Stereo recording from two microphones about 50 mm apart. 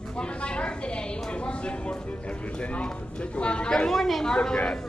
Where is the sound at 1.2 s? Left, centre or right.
Left.